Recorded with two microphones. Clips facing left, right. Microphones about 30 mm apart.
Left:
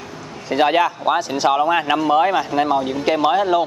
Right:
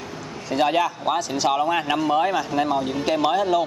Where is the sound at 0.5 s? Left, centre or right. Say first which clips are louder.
Left 4 dB; left.